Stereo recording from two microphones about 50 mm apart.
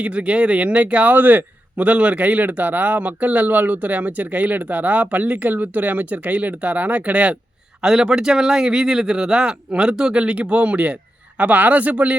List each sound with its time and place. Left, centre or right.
0.0 s a man's voice: right
7.8 s a man's voice: centre; by 12.1 s right